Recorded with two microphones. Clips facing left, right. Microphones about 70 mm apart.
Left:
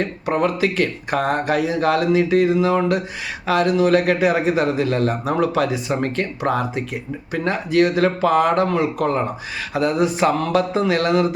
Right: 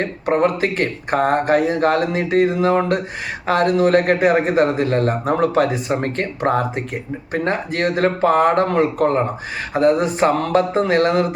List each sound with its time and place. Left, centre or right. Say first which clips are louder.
0.0 s speech: right 3 dB; right